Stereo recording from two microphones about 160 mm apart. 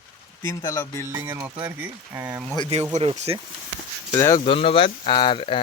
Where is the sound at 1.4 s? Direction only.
10° right (ahead or behind).